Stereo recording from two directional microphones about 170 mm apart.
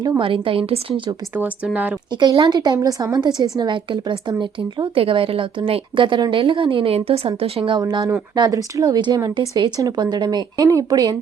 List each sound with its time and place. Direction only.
0.2 s a woman's voice: 30° right (ahead or behind)
1.4 s speech: 10° right (ahead or behind)
2.1 s a woman's voice: 25° right (ahead or behind)